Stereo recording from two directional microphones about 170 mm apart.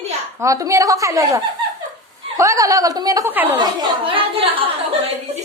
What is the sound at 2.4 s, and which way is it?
A woman's voice, 20° right (ahead or behind).